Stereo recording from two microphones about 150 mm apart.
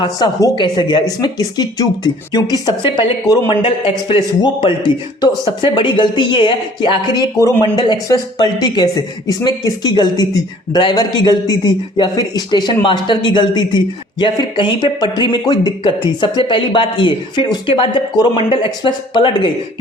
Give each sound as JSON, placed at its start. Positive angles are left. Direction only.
{"t": 0.0, "sound": "speech", "side_deg": 30}